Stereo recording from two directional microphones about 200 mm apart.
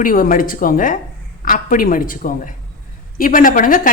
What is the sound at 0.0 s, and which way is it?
Speech, 45° left (ahead or behind).